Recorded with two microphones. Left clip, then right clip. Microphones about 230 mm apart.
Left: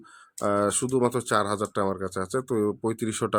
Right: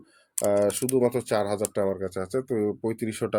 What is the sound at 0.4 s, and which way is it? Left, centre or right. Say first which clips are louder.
Speech: right 1 dB; centre.